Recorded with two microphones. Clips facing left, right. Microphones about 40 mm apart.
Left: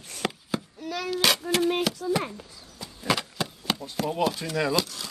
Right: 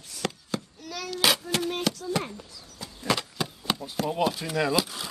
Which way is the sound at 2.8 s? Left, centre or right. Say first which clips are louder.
Left 1 dB; centre.